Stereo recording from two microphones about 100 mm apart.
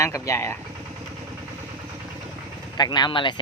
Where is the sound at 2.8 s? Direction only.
45° left (ahead or behind).